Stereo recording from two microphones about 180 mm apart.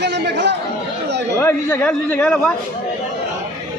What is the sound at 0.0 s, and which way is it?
Speech, 70° right (ahead or behind).